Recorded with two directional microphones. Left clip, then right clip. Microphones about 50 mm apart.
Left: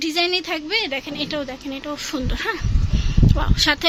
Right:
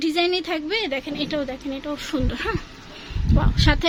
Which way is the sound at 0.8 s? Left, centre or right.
Centre.